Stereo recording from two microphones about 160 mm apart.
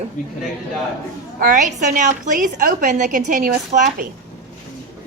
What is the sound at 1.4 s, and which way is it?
A woman's voice, 55° right (ahead or behind).